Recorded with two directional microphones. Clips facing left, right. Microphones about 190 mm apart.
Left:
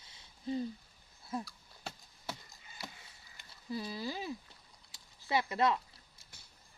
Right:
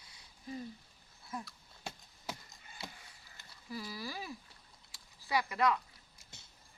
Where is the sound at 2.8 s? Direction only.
25° right (ahead or behind).